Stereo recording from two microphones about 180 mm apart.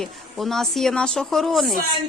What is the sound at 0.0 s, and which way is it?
Speech, centre (ahead or behind).